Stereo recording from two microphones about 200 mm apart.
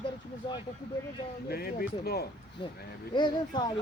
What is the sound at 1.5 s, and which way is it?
Speech, 50° left (ahead or behind).